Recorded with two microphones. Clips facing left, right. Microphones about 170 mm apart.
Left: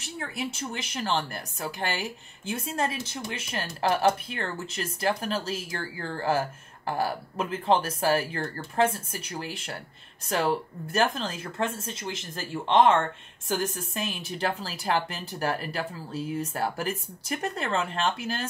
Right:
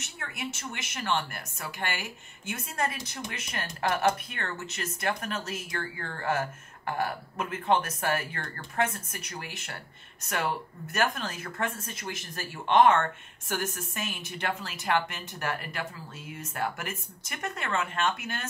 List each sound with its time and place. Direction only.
0.0 s speech: 30° left (ahead or behind)
14.1 s speech: 30° left (ahead or behind)